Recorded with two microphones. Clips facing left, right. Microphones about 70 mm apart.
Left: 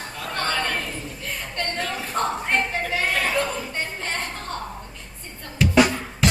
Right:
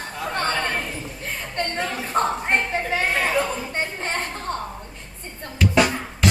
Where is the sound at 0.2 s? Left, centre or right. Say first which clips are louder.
Right 2 dB; right.